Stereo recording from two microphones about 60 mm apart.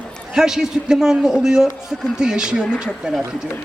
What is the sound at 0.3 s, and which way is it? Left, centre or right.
A man's voice, centre.